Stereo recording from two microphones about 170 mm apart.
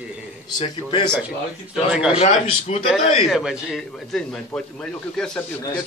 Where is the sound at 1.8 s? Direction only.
5° right (ahead or behind).